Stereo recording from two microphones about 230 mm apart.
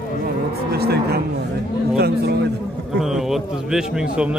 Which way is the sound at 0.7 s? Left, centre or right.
Right.